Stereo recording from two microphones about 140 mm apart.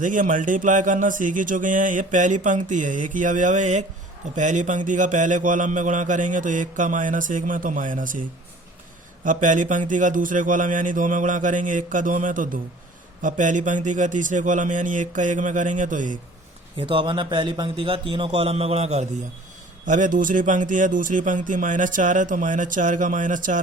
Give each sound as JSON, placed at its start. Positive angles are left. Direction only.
{"t": 0.0, "sound": "speech", "side_deg": -70}
{"t": 9.2, "sound": "speech", "side_deg": -70}
{"t": 16.7, "sound": "a man's voice", "side_deg": -35}
{"t": 19.8, "sound": "speech", "side_deg": -65}